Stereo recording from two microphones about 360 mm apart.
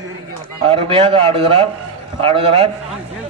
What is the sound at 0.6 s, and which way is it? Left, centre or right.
A man's voice, centre.